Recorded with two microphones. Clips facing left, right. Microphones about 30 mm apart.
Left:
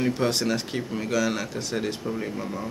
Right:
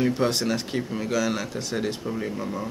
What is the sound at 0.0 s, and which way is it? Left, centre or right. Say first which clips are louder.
Speech: right 1 dB; centre.